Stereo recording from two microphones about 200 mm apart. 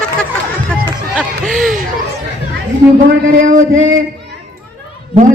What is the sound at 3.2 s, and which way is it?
Speech, 40° right (ahead or behind).